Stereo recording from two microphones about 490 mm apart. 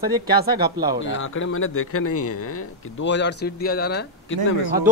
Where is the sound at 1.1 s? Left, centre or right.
Left.